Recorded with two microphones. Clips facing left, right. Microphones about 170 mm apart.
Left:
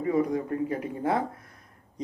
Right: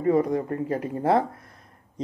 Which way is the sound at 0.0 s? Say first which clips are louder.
Right 4 dB; 45° right (ahead or behind).